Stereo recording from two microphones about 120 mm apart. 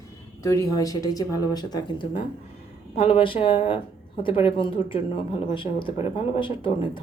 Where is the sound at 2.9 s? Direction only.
50° left (ahead or behind).